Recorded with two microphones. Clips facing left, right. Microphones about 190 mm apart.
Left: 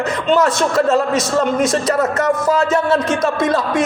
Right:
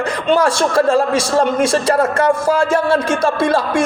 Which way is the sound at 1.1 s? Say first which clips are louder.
Right 1 dB; 10° right (ahead or behind).